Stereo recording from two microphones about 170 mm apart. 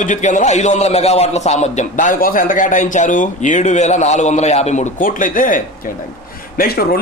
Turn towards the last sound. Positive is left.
turn(degrees=65)  # may be behind; listen again after turning